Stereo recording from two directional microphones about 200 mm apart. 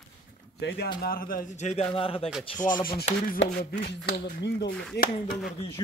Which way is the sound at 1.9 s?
25° left (ahead or behind).